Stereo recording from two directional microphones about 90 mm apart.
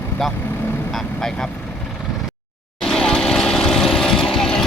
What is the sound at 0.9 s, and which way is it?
Speech, 5° left (ahead or behind).